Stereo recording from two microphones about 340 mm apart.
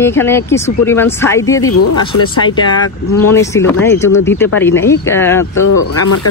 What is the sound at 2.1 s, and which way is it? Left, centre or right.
Speech, left.